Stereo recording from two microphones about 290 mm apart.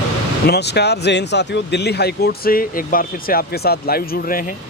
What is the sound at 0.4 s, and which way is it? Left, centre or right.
Speech, left.